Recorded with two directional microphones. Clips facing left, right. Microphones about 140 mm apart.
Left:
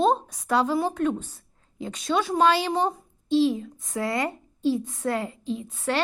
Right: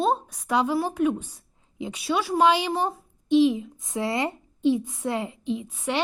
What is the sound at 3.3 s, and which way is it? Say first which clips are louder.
A woman's voice: right 2 dB; 15° right (ahead or behind).